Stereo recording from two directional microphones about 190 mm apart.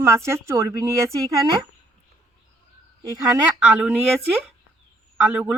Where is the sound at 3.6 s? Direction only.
5° right (ahead or behind).